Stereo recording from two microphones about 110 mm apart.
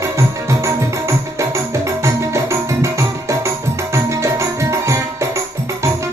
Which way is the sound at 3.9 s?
25° right (ahead or behind).